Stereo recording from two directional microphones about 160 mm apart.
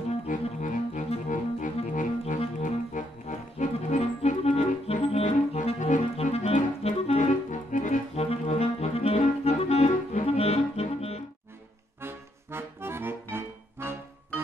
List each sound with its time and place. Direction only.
0.3 s music: 50° left (ahead or behind)
8.2 s clarinet: 40° left (ahead or behind)
12.0 s accordion: 15° right (ahead or behind)